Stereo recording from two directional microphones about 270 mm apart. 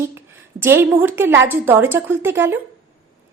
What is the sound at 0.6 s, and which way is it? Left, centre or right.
A woman's voice, centre.